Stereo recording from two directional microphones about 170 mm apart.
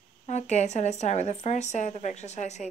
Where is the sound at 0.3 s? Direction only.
40° left (ahead or behind).